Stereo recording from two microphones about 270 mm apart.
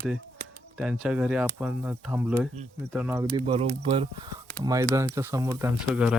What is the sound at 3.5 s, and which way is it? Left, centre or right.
Speech, centre.